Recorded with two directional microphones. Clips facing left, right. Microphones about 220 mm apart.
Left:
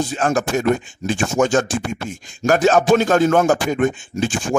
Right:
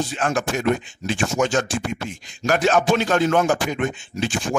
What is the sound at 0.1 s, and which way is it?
Speech, 45° left (ahead or behind).